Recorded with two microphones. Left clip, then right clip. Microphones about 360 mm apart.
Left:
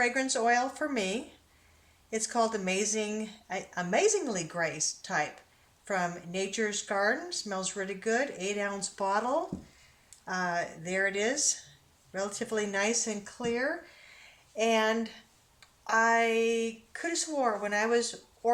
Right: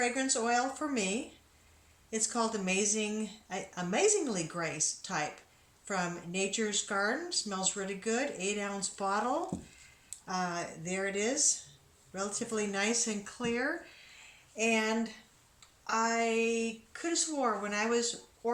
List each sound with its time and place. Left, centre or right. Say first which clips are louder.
0.0 s speech: left 4 dB; left